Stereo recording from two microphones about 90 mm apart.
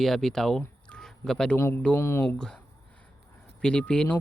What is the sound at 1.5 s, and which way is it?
Speech, 30° left (ahead or behind).